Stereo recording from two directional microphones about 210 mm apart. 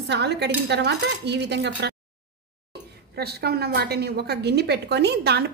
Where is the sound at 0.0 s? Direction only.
55° right (ahead or behind).